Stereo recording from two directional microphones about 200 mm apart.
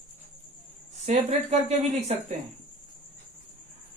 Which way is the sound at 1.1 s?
30° right (ahead or behind).